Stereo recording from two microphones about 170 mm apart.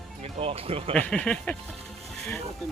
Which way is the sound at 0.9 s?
10° left (ahead or behind).